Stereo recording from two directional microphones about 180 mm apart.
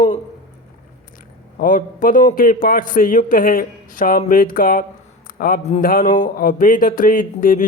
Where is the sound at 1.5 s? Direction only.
50° left (ahead or behind).